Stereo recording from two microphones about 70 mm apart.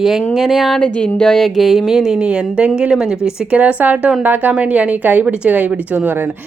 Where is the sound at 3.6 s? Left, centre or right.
Right.